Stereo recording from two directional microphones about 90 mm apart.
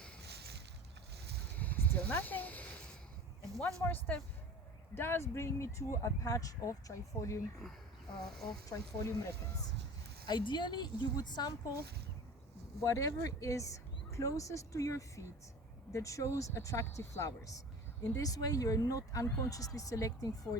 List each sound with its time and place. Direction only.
1.5 s a sound: 20° left (ahead or behind)
3.8 s speech: 20° left (ahead or behind)
7.6 s speech: centre (ahead or behind)
8.4 s a woman's voice: 50° left (ahead or behind)
9.0 s speech: 35° left (ahead or behind)
10.2 s a woman's voice: 60° left (ahead or behind)
12.8 s speech: 40° left (ahead or behind)